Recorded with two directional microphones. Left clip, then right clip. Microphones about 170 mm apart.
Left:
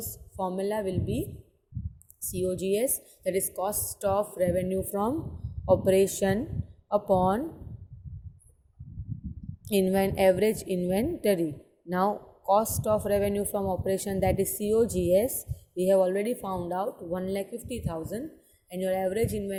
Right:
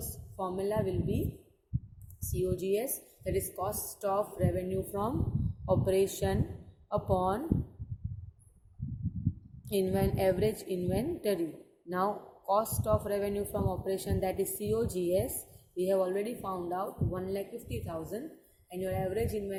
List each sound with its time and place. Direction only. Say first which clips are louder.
0.0 s a woman's voice: left 5 dB; 40° left (ahead or behind)
2.2 s a woman's voice: left 3 dB; 45° left (ahead or behind)
9.6 s a woman's voice: left 5 dB; 40° left (ahead or behind)